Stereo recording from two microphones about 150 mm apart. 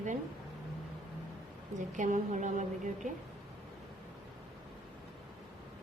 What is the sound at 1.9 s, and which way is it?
Speech, 55° right (ahead or behind).